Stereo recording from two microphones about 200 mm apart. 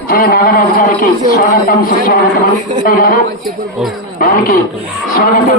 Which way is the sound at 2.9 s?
45° left (ahead or behind).